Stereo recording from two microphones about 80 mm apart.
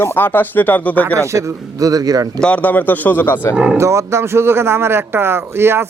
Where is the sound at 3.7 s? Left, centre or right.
Right.